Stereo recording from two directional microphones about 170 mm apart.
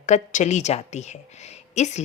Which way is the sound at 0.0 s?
45° left (ahead or behind).